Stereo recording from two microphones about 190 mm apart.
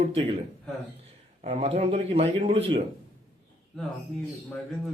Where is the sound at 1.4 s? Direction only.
30° right (ahead or behind).